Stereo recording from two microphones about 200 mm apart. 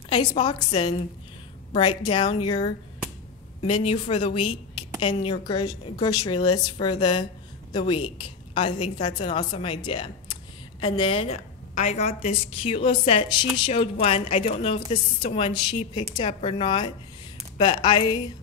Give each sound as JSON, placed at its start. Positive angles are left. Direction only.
{"t": 0.3, "sound": "a woman's voice", "side_deg": 20}